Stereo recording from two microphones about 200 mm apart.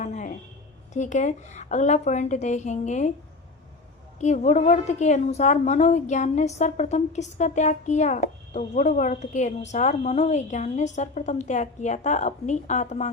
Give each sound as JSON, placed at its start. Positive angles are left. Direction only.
{"t": 0.0, "sound": "a sound", "side_deg": 35}
{"t": 0.9, "sound": "a woman's voice", "side_deg": 40}
{"t": 4.2, "sound": "a woman's voice", "side_deg": 35}